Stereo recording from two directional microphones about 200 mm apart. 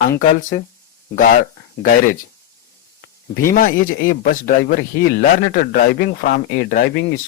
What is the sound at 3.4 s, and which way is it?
Speech, 45° left (ahead or behind).